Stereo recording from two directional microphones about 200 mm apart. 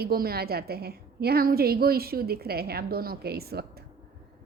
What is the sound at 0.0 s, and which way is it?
A woman's voice, 50° right (ahead or behind).